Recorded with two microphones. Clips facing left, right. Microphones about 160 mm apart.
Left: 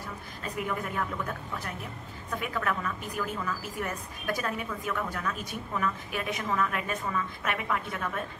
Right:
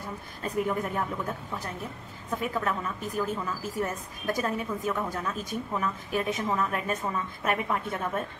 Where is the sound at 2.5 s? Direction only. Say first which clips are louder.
Left 2 dB; 25° right (ahead or behind).